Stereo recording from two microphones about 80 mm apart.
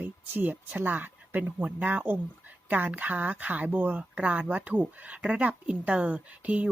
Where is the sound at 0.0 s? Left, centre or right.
Right.